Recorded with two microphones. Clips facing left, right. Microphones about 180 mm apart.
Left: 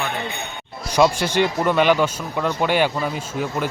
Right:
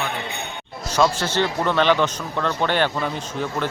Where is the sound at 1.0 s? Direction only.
15° left (ahead or behind).